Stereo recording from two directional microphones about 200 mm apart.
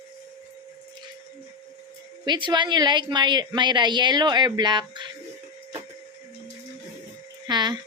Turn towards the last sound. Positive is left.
turn(degrees=-20)  # may be behind; listen again after turning